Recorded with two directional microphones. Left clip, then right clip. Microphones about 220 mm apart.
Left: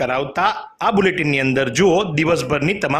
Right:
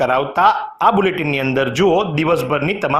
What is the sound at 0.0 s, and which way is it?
Speech, 15° left (ahead or behind).